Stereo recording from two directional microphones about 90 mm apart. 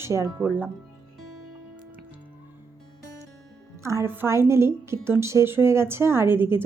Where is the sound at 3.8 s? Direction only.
35° right (ahead or behind).